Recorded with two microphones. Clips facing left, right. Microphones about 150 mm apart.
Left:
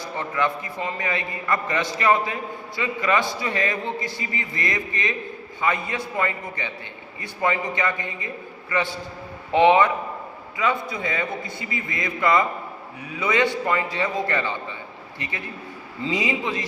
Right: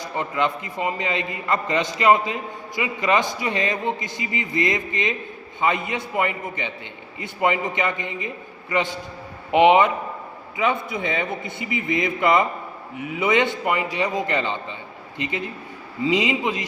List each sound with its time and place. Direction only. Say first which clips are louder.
0.0 s a man's voice: right 1 dB; 20° right (ahead or behind)